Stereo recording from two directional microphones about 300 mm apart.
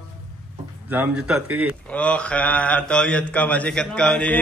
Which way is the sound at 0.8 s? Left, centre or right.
Centre.